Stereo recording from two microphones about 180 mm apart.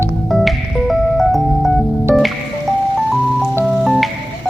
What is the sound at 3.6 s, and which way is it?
Music, 5° right (ahead or behind).